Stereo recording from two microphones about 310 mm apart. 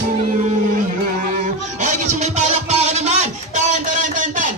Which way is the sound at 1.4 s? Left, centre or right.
Right.